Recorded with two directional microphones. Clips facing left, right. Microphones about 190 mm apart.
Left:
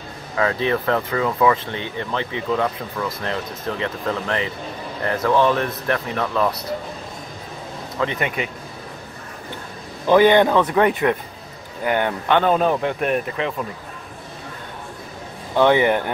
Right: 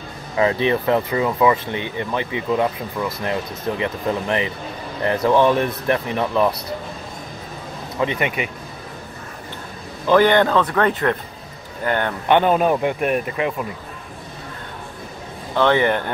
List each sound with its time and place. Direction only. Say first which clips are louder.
0.4 s speech: right 2 dB; 20° right (ahead or behind)
8.0 s speech: right 2 dB; 15° right (ahead or behind)
10.0 s speech: left 1 dB; 15° left (ahead or behind)
12.3 s speech: right 2 dB; 15° right (ahead or behind)
15.5 s speech: left 1 dB; 15° left (ahead or behind)